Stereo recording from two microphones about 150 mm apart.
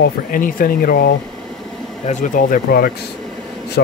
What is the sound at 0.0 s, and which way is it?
Speech, 65° left (ahead or behind).